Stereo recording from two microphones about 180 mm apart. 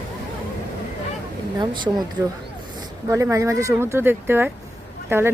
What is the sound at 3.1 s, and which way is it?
Speech, 15° right (ahead or behind).